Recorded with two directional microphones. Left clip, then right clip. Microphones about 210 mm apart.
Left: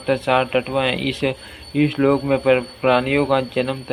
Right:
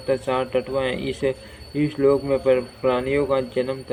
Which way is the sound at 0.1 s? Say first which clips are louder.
Left 4 dB; 20° left (ahead or behind).